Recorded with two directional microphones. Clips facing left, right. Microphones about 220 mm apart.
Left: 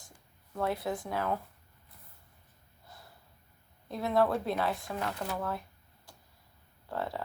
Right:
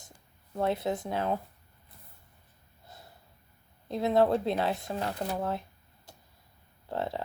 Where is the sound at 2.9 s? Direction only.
25° right (ahead or behind).